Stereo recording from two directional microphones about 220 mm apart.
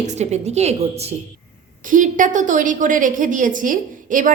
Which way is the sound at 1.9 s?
35° right (ahead or behind).